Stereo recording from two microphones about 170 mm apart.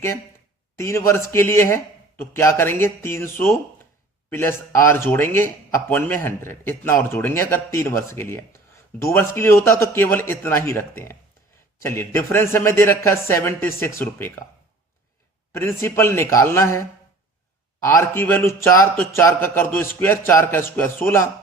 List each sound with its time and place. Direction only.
0.8 s speech: 15° left (ahead or behind)
15.5 s speech: 15° left (ahead or behind)